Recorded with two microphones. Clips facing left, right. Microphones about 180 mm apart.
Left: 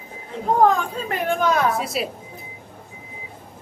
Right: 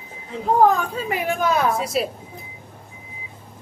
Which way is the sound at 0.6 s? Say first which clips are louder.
Right 1 dB; 5° right (ahead or behind).